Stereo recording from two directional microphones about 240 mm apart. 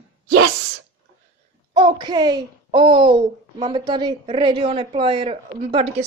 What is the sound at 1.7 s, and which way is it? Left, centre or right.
A woman's voice, centre.